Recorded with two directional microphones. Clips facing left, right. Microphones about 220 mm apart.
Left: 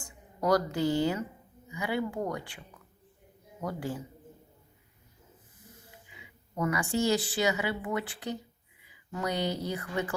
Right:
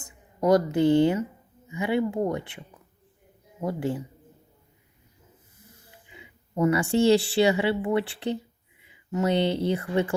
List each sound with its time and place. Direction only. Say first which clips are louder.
0.0 s speech: right 6 dB; 20° right (ahead or behind)
6.1 s a woman's voice: right 5 dB; 25° right (ahead or behind)